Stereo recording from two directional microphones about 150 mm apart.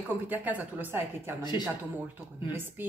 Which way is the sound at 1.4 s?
30° left (ahead or behind).